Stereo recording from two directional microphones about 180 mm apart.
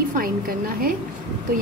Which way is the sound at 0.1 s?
55° right (ahead or behind).